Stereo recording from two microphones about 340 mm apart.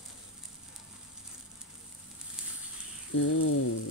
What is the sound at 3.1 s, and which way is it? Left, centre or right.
Speech, left.